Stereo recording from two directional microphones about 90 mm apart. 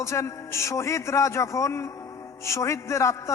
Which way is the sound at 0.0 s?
35° left (ahead or behind).